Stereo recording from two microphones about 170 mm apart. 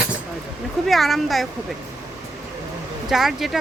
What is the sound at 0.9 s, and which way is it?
Speech, centre (ahead or behind).